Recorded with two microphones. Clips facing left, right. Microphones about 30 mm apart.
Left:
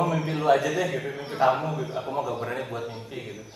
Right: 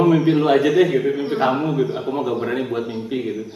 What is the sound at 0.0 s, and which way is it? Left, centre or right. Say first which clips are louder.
A man's voice: right 9 dB; right.